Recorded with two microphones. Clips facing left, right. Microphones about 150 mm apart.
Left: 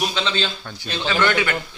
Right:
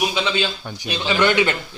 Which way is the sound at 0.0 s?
10° right (ahead or behind).